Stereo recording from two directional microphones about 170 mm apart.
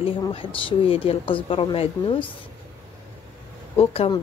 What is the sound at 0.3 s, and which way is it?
Speech, 30° left (ahead or behind).